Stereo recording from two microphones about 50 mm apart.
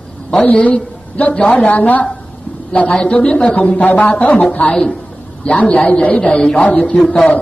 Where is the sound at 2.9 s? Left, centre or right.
Left.